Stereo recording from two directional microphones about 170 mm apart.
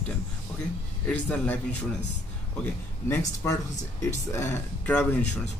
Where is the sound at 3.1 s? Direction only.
20° left (ahead or behind).